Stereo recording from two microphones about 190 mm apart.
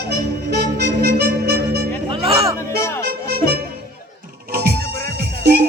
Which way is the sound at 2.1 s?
30° right (ahead or behind).